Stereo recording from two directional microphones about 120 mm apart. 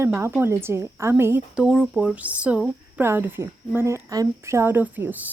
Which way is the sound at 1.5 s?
5° right (ahead or behind).